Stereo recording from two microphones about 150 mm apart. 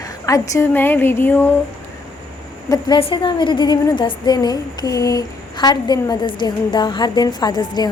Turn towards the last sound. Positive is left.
turn(degrees=30)  # may be behind; listen again after turning